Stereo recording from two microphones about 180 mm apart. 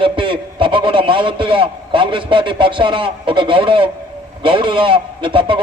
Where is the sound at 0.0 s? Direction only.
30° right (ahead or behind).